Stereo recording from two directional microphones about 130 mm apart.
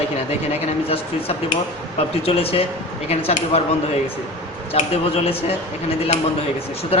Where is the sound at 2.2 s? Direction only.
50° left (ahead or behind).